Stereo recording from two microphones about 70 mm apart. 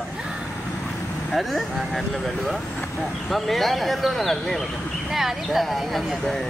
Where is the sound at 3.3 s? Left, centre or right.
Centre.